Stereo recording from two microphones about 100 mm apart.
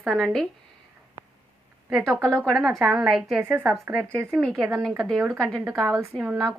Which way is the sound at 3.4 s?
15° right (ahead or behind).